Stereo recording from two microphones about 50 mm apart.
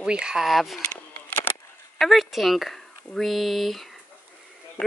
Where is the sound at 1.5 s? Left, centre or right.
Left.